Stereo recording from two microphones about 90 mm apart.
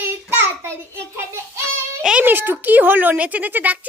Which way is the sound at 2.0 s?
10° right (ahead or behind).